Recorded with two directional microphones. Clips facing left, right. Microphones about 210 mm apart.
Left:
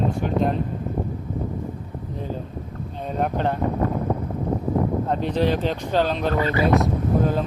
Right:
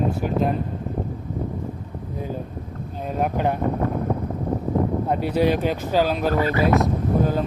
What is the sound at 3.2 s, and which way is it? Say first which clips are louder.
Speech: right 1 dB; 10° right (ahead or behind).